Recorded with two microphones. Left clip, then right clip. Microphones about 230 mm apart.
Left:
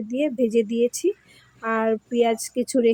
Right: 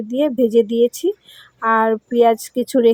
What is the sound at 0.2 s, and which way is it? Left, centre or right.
A woman's voice, centre.